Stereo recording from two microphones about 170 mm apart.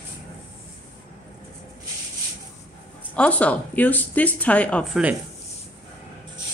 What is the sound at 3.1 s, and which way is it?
Speech, 10° left (ahead or behind).